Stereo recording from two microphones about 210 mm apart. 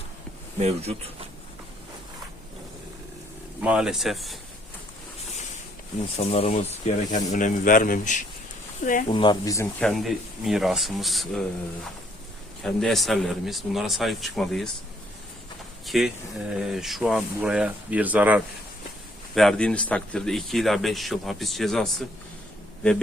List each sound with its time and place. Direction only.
0.6 s speech: 30° right (ahead or behind)
3.6 s a man's voice: 5° right (ahead or behind)
6.1 s speech: 30° left (ahead or behind)
9.0 s speech: 25° left (ahead or behind)
9.8 s a man's voice: centre (ahead or behind)
12.6 s a man's voice: centre (ahead or behind)
15.9 s a man's voice: centre (ahead or behind)